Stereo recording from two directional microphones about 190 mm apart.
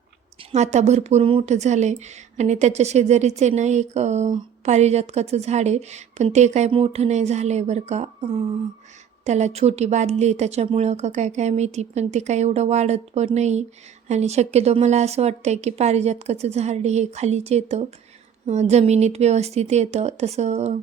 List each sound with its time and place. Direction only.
0.5 s speech: 35° right (ahead or behind)